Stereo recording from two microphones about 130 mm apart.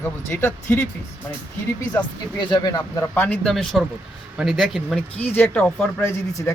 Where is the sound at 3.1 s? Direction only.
10° left (ahead or behind).